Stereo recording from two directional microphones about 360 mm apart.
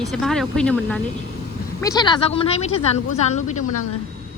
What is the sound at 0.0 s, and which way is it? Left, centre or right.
A woman's voice, centre.